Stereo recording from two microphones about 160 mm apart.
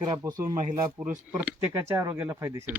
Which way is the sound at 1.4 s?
10° right (ahead or behind).